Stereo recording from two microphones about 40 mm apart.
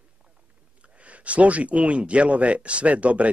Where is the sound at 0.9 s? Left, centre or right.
Right.